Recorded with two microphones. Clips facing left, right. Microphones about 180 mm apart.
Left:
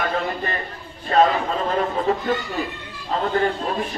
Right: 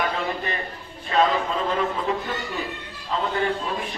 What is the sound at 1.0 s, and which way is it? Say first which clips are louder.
Speech: left 3 dB; 40° left (ahead or behind).